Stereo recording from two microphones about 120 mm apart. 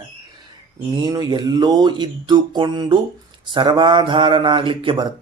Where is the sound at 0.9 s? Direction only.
40° right (ahead or behind).